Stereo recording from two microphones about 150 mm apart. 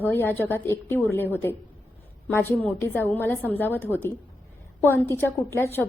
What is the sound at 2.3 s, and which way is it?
A woman's voice, 15° left (ahead or behind).